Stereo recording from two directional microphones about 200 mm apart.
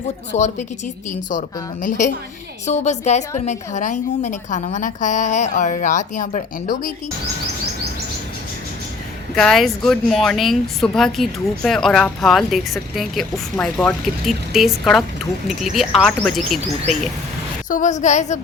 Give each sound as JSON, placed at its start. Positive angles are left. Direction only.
{"t": 0.3, "sound": "a woman's voice", "side_deg": 35}
{"t": 9.3, "sound": "speech", "side_deg": 0}
{"t": 16.9, "sound": "speech", "side_deg": -35}
{"t": 17.7, "sound": "a woman's voice", "side_deg": 40}